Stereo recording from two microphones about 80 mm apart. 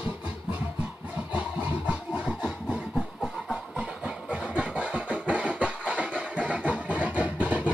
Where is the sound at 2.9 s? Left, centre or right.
Centre.